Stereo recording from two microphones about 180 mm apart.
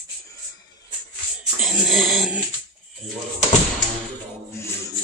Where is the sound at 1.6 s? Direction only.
Centre (ahead or behind).